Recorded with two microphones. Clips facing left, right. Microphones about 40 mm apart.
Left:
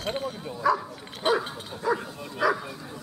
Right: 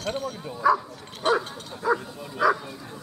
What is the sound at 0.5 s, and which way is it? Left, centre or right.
Speech, centre.